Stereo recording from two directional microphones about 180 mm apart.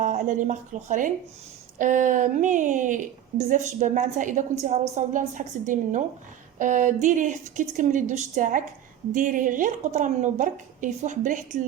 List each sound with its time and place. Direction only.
0.0 s a woman's voice: 45° right (ahead or behind)